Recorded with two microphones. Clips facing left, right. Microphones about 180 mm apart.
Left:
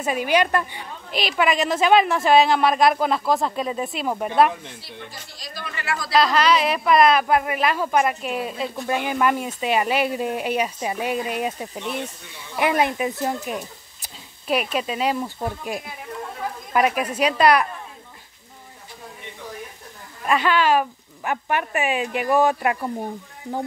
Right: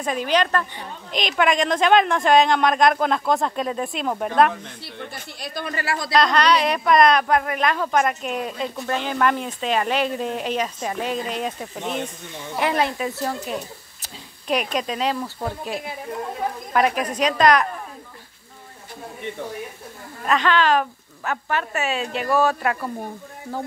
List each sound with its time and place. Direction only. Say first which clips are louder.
0.0 s a woman's voice: left 1 dB; 10° left (ahead or behind)
4.8 s speech: right 4 dB; 60° right (ahead or behind); by 5.9 s 40° right (ahead or behind)
6.1 s speech: even; 5° left (ahead or behind)
14.0 s speech: even; 5° left (ahead or behind)
16.7 s speech: left 1 dB; 5° left (ahead or behind)
20.2 s speech: even; 10° left (ahead or behind)